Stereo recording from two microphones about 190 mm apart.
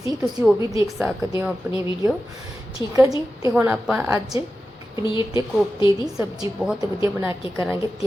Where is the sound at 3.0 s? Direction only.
20° right (ahead or behind).